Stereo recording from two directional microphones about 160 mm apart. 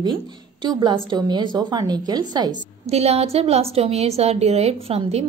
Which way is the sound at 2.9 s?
40° right (ahead or behind).